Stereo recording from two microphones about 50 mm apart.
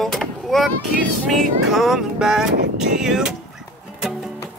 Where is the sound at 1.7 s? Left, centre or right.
Centre.